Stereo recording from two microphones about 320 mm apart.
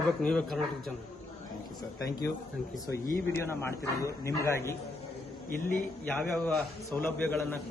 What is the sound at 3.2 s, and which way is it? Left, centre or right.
A man's voice, centre.